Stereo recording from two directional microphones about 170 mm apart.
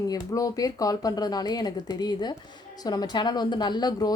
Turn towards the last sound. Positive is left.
turn(degrees=25)  # may be behind; listen again after turning